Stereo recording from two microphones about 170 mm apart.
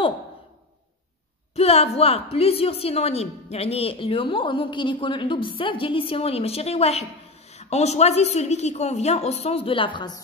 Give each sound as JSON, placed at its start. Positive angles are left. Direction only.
{"t": 1.5, "sound": "a woman's voice", "side_deg": 35}